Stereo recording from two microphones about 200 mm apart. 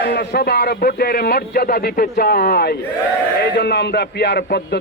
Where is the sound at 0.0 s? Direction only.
50° left (ahead or behind).